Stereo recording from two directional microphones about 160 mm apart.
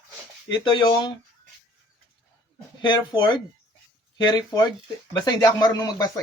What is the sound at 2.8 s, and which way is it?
Speech, 30° left (ahead or behind).